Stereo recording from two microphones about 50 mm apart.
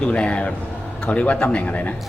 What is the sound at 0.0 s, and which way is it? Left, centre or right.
A man's voice, left.